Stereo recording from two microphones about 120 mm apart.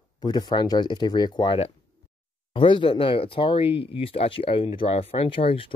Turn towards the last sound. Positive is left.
turn(degrees=50)  # may be behind; listen again after turning